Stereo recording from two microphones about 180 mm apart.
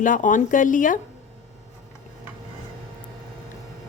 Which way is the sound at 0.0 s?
45° left (ahead or behind).